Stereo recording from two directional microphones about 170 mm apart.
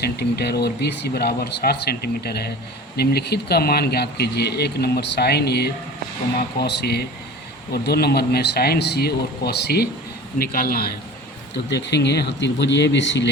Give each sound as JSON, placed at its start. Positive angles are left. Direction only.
{"t": 0.0, "sound": "speech", "side_deg": 70}
{"t": 10.3, "sound": "a man's voice", "side_deg": 60}
{"t": 11.7, "sound": "speech", "side_deg": 90}